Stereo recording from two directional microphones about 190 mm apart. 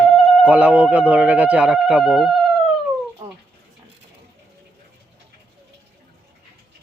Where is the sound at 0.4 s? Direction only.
5° right (ahead or behind).